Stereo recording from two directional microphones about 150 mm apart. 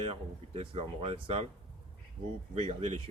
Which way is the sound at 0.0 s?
40° right (ahead or behind).